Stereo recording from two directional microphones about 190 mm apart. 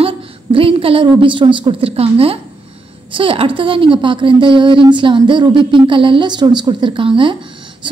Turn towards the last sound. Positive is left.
turn(degrees=-25)  # may be behind; listen again after turning